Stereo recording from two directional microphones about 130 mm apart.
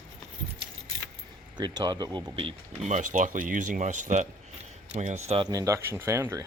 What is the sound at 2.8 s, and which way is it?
A man's voice, 70° right (ahead or behind).